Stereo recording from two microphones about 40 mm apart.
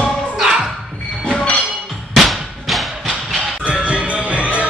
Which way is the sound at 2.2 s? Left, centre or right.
Centre.